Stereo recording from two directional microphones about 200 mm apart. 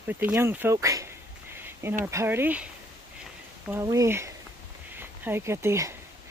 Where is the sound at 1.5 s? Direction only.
10° right (ahead or behind).